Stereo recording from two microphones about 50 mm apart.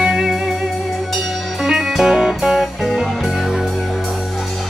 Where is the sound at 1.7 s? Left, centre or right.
Centre.